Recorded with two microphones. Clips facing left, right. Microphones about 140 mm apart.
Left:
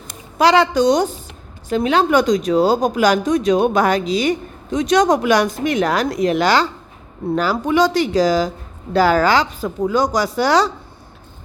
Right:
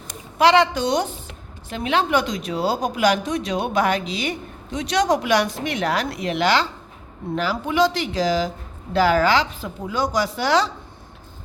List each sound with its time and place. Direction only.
0.3 s speech: 40° left (ahead or behind)